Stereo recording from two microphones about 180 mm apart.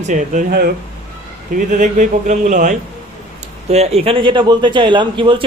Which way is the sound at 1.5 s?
45° right (ahead or behind).